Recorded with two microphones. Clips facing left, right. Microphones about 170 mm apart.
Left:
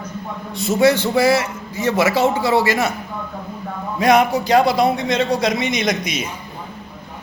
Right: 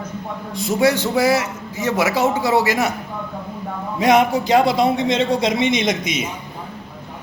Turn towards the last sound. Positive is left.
turn(degrees=-25)  # may be behind; listen again after turning